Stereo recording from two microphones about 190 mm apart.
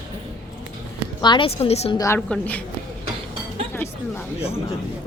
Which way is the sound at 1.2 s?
25° left (ahead or behind).